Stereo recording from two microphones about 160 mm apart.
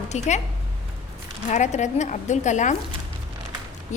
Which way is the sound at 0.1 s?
45° left (ahead or behind).